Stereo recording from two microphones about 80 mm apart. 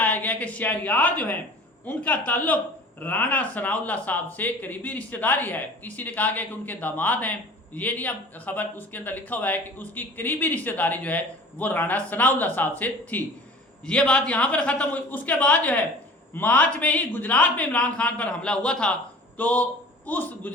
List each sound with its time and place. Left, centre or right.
0.0 s a woman's voice: centre